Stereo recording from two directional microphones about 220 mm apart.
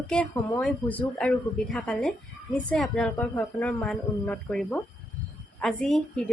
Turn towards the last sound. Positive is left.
turn(degrees=0)  # may be behind; listen again after turning